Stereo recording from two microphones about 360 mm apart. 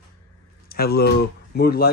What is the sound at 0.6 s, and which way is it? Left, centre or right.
Speech, left.